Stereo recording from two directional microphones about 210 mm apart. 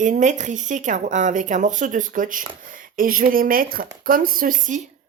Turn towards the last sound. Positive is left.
turn(degrees=-40)  # may be behind; listen again after turning